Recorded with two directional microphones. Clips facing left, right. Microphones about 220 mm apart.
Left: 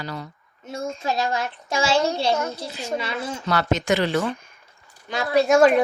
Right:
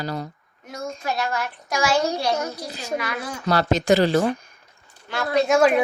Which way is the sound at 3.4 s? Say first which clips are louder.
Right 3 dB; 35° right (ahead or behind).